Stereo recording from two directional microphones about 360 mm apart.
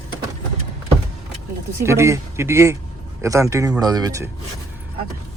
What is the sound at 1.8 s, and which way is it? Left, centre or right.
Speech, centre.